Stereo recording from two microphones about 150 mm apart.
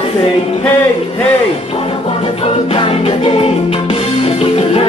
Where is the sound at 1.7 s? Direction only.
40° left (ahead or behind).